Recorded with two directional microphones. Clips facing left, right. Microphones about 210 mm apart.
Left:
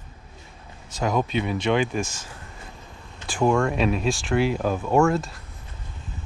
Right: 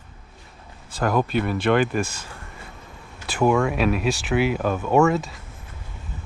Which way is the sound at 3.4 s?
5° right (ahead or behind).